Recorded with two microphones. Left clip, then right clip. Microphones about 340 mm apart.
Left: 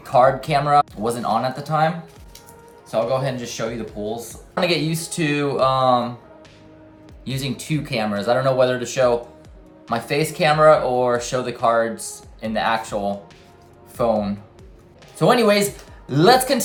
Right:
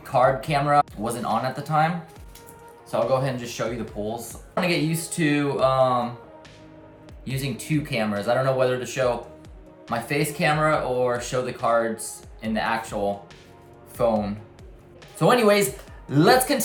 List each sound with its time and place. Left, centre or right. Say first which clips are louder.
0.0 s speech: left 4 dB; centre
2.9 s speech: left 2 dB; centre
7.3 s speech: left 3 dB; centre